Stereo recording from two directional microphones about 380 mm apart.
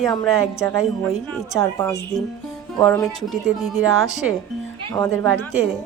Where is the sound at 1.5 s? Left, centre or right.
Centre.